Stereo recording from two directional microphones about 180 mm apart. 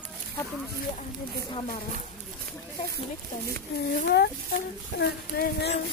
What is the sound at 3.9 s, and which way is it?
Speech, 65° left (ahead or behind).